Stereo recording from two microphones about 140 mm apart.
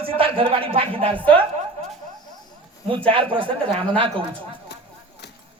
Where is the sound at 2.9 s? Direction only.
40° right (ahead or behind).